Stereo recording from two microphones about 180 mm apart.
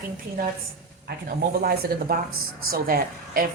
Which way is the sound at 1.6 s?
60° right (ahead or behind).